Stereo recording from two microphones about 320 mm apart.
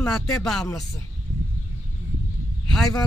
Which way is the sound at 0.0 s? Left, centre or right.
Centre.